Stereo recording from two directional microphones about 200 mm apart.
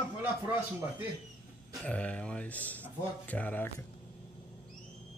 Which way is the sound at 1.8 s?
5° left (ahead or behind).